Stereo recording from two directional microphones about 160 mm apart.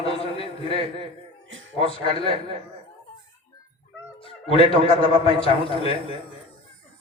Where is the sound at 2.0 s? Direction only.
35° left (ahead or behind).